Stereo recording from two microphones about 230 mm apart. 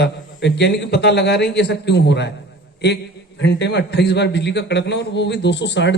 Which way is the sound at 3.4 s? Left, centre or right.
Left.